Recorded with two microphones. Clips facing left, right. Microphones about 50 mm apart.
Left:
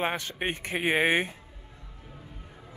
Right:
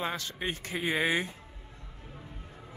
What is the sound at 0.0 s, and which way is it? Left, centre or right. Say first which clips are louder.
Speech: left 4 dB; left.